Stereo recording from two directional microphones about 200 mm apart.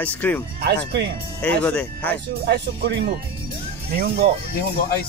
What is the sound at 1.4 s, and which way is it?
Speech, 5° left (ahead or behind).